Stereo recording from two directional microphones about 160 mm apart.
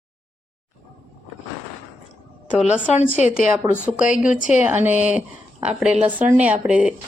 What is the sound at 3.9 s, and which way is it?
Speech, 5° right (ahead or behind).